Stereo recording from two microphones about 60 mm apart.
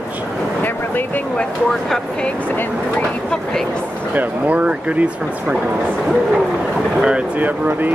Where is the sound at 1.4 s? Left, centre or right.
Centre.